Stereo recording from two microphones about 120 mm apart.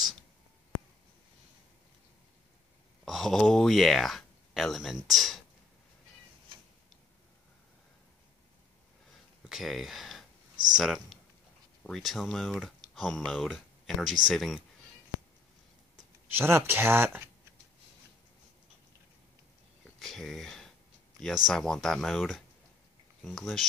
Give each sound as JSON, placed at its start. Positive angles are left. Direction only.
{"t": 3.1, "sound": "speech", "side_deg": 0}
{"t": 9.5, "sound": "speech", "side_deg": 0}
{"t": 10.5, "sound": "a sound", "side_deg": -35}
{"t": 10.8, "sound": "speech", "side_deg": 0}
{"t": 16.3, "sound": "speech", "side_deg": -20}
{"t": 20.0, "sound": "speech", "side_deg": 5}